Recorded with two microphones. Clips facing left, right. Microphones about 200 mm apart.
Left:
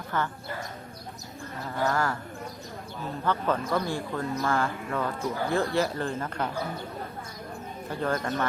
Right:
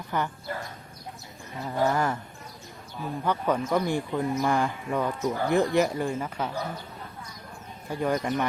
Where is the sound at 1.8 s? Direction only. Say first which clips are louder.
Right 1 dB; 20° right (ahead or behind).